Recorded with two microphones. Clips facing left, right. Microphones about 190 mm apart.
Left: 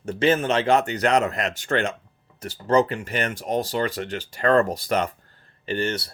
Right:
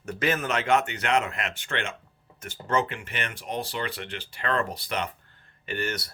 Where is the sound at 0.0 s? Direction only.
30° left (ahead or behind).